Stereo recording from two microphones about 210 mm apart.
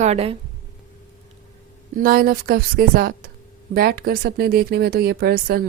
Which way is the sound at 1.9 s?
40° right (ahead or behind).